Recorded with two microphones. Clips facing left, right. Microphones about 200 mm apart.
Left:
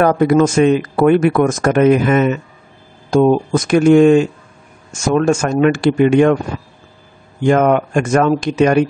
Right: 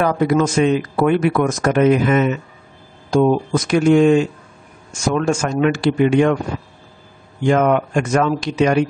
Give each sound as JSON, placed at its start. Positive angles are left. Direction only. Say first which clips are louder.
{"t": 0.0, "sound": "speech", "louder": "left 4 dB", "side_deg": 50}
{"t": 7.4, "sound": "speech", "louder": "left 3 dB", "side_deg": 50}